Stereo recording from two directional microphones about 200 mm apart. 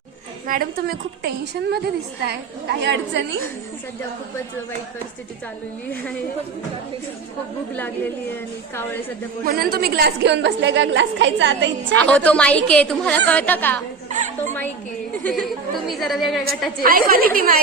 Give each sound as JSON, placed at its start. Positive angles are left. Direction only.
{"t": 0.4, "sound": "a woman's voice", "side_deg": -45}
{"t": 8.7, "sound": "a woman's voice", "side_deg": 10}
{"t": 9.4, "sound": "a woman's voice", "side_deg": -50}
{"t": 11.9, "sound": "a woman's voice", "side_deg": 5}
{"t": 14.1, "sound": "a woman's voice", "side_deg": -35}
{"t": 15.2, "sound": "a woman's voice", "side_deg": 0}
{"t": 16.8, "sound": "a woman's voice", "side_deg": -45}